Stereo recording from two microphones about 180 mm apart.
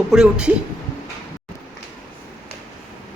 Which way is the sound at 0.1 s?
5° right (ahead or behind).